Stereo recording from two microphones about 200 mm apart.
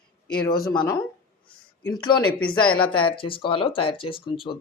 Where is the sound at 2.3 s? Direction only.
5° left (ahead or behind).